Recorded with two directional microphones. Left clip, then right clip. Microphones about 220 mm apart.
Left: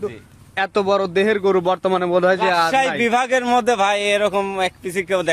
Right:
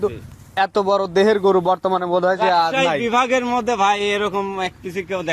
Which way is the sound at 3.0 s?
50° left (ahead or behind).